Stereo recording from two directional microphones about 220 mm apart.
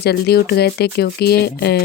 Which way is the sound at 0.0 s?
45° left (ahead or behind).